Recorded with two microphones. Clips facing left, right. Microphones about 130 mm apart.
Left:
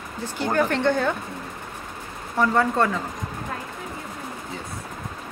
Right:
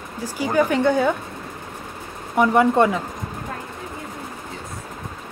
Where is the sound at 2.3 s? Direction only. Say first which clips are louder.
Right 5 dB; 15° right (ahead or behind).